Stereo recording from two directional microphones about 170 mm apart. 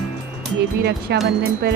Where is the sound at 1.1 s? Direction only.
85° right.